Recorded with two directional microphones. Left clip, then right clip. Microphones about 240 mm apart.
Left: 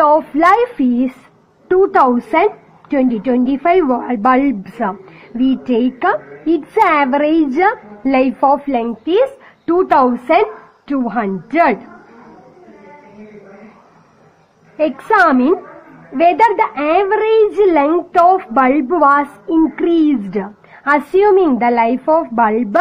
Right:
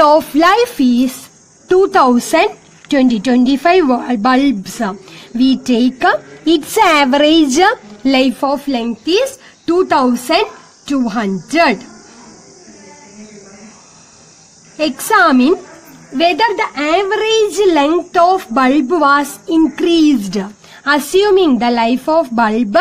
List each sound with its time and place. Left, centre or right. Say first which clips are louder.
0.0 s a woman's voice: right 2 dB; right
8.7 s a woman's voice: left 1 dB; right
14.8 s a woman's voice: right 1 dB; right